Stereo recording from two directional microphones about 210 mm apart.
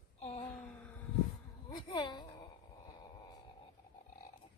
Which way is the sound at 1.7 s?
20° left (ahead or behind).